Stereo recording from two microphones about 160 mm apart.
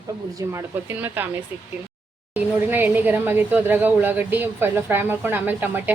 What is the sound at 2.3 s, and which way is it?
Speech, 10° right (ahead or behind).